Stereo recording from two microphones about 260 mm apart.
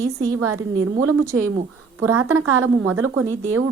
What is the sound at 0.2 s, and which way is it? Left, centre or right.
Speech, right.